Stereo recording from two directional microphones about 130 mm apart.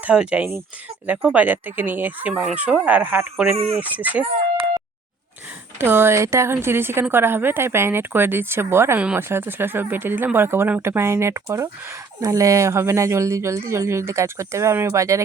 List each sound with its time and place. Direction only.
0.0 s a woman's voice: 10° right (ahead or behind)
5.8 s a woman's voice: 15° right (ahead or behind)